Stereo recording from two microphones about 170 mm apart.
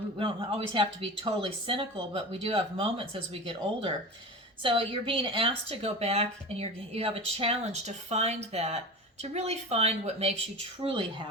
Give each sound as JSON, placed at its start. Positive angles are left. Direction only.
{"t": 0.2, "sound": "a woman's voice", "side_deg": -30}